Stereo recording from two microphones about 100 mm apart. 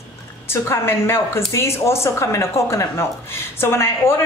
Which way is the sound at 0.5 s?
25° left (ahead or behind).